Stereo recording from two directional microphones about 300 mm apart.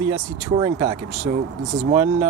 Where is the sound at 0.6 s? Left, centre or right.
Centre.